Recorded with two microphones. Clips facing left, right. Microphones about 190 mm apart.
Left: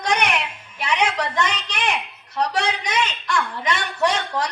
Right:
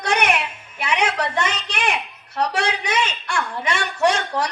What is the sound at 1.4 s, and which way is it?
A man's voice, 10° right (ahead or behind).